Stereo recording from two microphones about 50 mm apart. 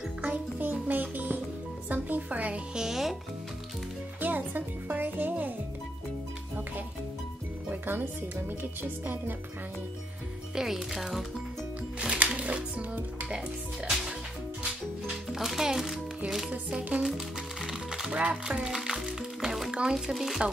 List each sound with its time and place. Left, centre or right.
0.2 s music: right
1.9 s speech: right
2.7 s speech: centre
4.2 s music: right
7.7 s a woman's voice: right
10.5 s speech: centre
12.4 s music: right
13.8 s music: centre
16.3 s speech: centre
17.6 s music: centre
18.2 s speech: right; by 20.4 s centre